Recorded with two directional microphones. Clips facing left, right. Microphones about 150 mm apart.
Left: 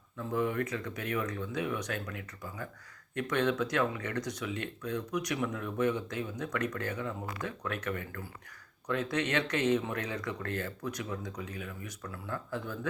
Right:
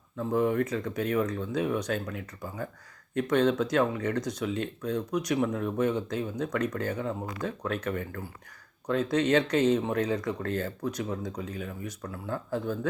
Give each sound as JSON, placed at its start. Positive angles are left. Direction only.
{"t": 0.2, "sound": "speech", "side_deg": -40}